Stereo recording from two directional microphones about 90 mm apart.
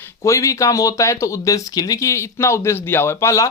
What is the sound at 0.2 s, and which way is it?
Speech, 35° left (ahead or behind).